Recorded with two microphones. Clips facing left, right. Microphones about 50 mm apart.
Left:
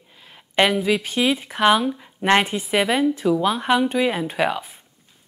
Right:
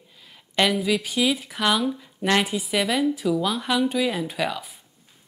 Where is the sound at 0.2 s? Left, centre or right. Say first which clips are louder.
Left 3 dB; left.